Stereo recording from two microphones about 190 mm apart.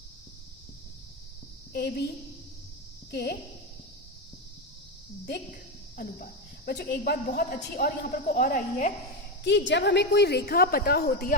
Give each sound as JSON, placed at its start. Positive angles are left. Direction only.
{"t": 1.7, "sound": "a woman's voice", "side_deg": 55}
{"t": 3.1, "sound": "speech", "side_deg": 55}
{"t": 6.0, "sound": "speech", "side_deg": 55}
{"t": 9.4, "sound": "a woman's voice", "side_deg": 65}